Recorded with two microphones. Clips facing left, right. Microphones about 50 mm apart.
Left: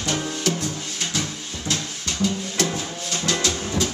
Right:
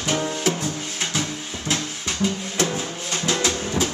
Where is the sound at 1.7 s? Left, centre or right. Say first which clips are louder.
Right 2 dB; centre.